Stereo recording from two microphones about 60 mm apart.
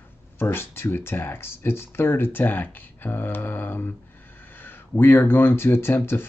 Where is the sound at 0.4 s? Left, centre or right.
Left.